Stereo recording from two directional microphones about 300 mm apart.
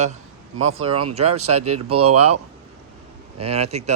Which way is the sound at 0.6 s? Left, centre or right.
Right.